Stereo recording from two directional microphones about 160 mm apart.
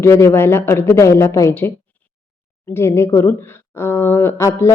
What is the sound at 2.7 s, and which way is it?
Speech, 15° left (ahead or behind).